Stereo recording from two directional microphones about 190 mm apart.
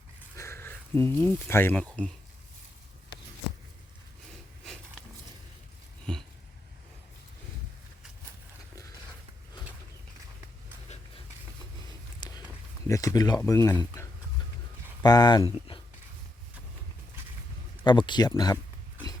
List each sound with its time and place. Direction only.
0.3 s speech: 15° left (ahead or behind)
6.1 s a sound: 5° left (ahead or behind)
12.2 s walk: 20° left (ahead or behind)
12.9 s a sound: 15° left (ahead or behind)
13.4 s speech: 15° left (ahead or behind)
15.0 s speech: 20° left (ahead or behind)
17.8 s speech: 25° left (ahead or behind)